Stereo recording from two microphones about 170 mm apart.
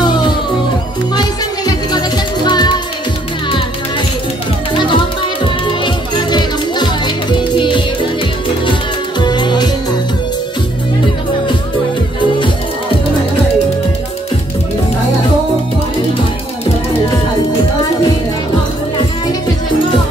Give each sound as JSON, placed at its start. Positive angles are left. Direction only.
{"t": 0.0, "sound": "music", "side_deg": 25}
{"t": 1.7, "sound": "music", "side_deg": 25}
{"t": 4.7, "sound": "music", "side_deg": 30}
{"t": 9.2, "sound": "music", "side_deg": 25}